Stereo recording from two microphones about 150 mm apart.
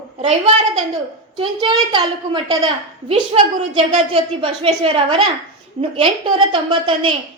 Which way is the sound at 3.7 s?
40° right (ahead or behind).